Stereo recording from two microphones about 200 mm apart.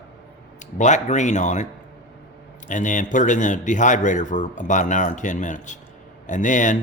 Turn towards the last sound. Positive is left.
turn(degrees=40)  # may be behind; listen again after turning